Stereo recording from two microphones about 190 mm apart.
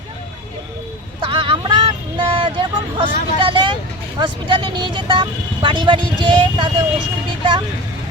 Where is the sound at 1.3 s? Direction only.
25° right (ahead or behind).